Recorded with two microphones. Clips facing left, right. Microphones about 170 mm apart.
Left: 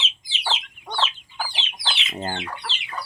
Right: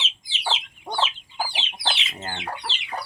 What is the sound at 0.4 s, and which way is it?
Chicken, 10° right (ahead or behind).